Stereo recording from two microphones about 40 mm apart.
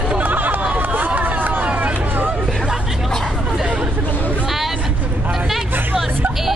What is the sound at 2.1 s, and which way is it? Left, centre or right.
Hubbub, right.